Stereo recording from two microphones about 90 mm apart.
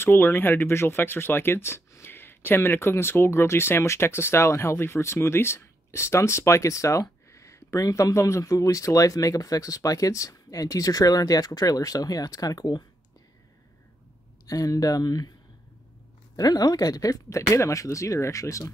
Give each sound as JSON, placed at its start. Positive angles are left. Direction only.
{"t": 0.0, "sound": "speech", "side_deg": 25}
{"t": 14.4, "sound": "speech", "side_deg": 40}
{"t": 16.3, "sound": "speech", "side_deg": 45}